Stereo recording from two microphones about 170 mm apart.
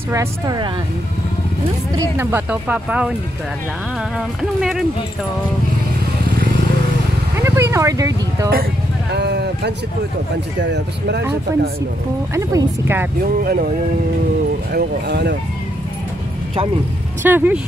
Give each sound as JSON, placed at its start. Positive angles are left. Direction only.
{"t": 0.1, "sound": "speech", "side_deg": -20}
{"t": 2.0, "sound": "speech", "side_deg": -10}
{"t": 4.4, "sound": "speech", "side_deg": -5}
{"t": 7.4, "sound": "speech", "side_deg": -15}
{"t": 9.1, "sound": "speech", "side_deg": -75}
{"t": 10.6, "sound": "speech", "side_deg": -90}
{"t": 12.4, "sound": "speech", "side_deg": -15}
{"t": 13.4, "sound": "speech", "side_deg": -60}
{"t": 14.7, "sound": "speech", "side_deg": -75}
{"t": 17.2, "sound": "speech", "side_deg": -10}